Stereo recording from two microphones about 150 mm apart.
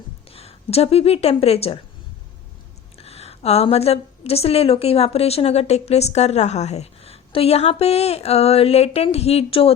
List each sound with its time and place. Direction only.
0.3 s speech: 40° left (ahead or behind)
3.0 s a woman's voice: 45° left (ahead or behind)